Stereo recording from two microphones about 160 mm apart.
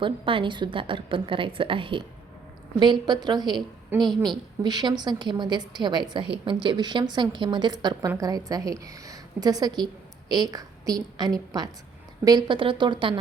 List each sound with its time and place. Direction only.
0.0 s a woman's voice: 30° right (ahead or behind)
3.9 s a woman's voice: 15° right (ahead or behind)
4.6 s a woman's voice: 25° right (ahead or behind)